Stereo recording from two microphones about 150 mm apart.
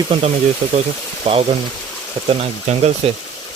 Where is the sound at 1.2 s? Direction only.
40° right (ahead or behind).